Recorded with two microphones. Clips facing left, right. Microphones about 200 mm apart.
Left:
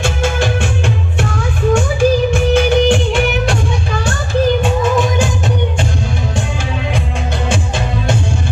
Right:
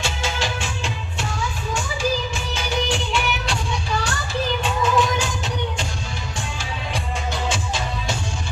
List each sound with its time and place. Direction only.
0.0 s music: 55° left (ahead or behind)